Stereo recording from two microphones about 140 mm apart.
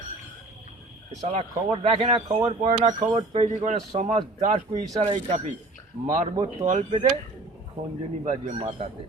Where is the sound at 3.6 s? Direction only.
55° right (ahead or behind).